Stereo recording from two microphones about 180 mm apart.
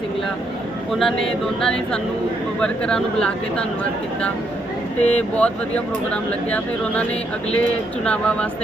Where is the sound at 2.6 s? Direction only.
5° left (ahead or behind).